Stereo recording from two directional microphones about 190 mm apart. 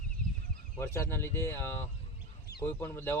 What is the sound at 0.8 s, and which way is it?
Speech, 15° left (ahead or behind).